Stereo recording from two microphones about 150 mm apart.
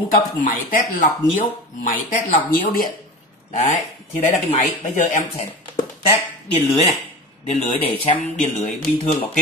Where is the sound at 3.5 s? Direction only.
45° left (ahead or behind).